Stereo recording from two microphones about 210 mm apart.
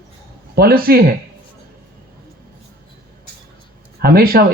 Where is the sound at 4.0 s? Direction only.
45° right (ahead or behind).